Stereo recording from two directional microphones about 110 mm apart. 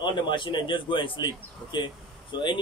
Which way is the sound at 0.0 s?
45° left (ahead or behind).